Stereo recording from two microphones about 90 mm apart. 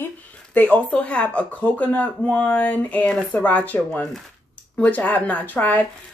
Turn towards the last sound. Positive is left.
turn(degrees=20)  # may be behind; listen again after turning